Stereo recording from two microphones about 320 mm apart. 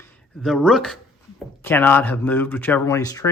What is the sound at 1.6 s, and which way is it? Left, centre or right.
Speech, centre.